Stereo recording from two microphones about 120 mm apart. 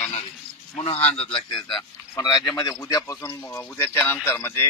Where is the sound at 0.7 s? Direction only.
55° left (ahead or behind).